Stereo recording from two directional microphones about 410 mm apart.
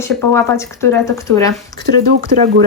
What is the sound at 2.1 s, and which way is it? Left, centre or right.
Speech, right.